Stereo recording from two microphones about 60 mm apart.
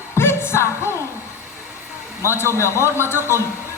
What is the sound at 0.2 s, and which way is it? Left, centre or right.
Music, left.